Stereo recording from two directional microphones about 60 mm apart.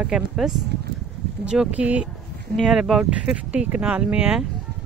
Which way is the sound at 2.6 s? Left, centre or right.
Centre.